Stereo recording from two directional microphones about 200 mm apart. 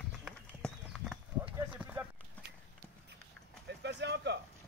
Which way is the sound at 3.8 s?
60° right (ahead or behind).